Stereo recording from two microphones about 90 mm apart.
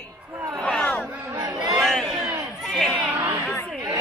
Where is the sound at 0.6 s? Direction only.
10° left (ahead or behind).